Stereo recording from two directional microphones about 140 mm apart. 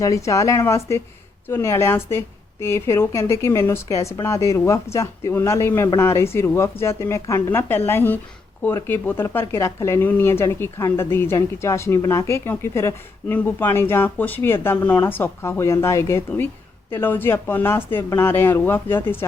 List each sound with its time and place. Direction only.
0.0 s a woman's voice: 25° left (ahead or behind)